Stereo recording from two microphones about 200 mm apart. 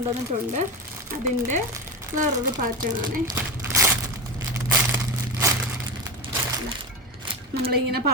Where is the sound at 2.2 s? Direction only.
45° right (ahead or behind).